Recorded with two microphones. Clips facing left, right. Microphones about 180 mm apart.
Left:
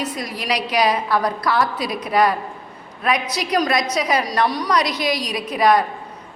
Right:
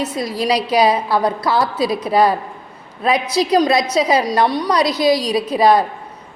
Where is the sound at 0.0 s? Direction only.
25° right (ahead or behind).